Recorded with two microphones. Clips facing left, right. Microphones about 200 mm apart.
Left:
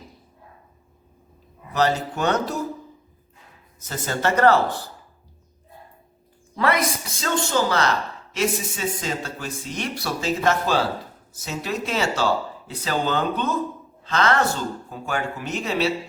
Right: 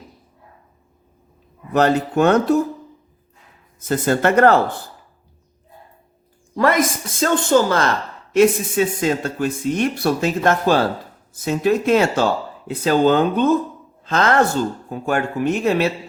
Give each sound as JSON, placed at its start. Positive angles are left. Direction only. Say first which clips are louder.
{"t": 1.7, "sound": "speech", "louder": "right 6 dB", "side_deg": -55}
{"t": 3.8, "sound": "speech", "louder": "right 9 dB", "side_deg": -55}
{"t": 6.6, "sound": "a woman's voice", "louder": "right 5 dB", "side_deg": -45}